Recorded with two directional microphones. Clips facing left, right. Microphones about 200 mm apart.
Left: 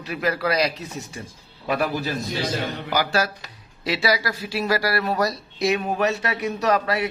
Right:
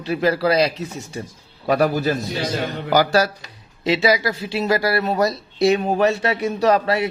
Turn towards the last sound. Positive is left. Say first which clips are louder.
# right 4 dB
turn(degrees=-25)  # may be behind; listen again after turning